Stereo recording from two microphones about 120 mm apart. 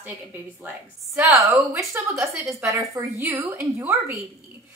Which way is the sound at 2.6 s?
25° right (ahead or behind).